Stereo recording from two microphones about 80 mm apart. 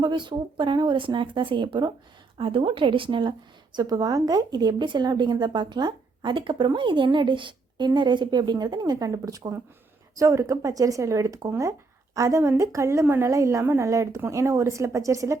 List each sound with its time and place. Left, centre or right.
0.0 s a woman's voice: right
3.8 s speech: right
10.2 s a woman's voice: right